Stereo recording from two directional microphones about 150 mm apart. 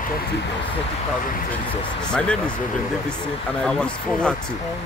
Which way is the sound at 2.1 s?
5° left (ahead or behind).